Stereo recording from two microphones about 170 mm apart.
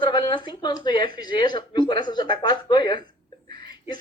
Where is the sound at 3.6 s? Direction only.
25° left (ahead or behind).